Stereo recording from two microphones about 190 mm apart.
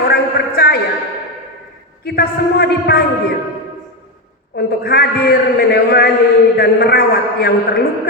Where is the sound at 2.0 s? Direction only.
55° left (ahead or behind).